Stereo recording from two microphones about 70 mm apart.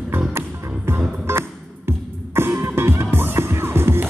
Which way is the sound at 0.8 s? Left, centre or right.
Right.